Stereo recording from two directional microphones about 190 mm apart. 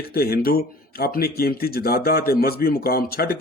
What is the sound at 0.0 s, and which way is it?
Speech, 55° left (ahead or behind).